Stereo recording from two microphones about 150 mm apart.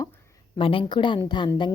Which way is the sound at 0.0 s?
20° left (ahead or behind).